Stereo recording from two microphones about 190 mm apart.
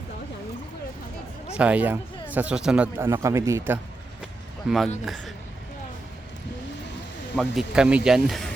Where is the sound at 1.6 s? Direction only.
5° right (ahead or behind).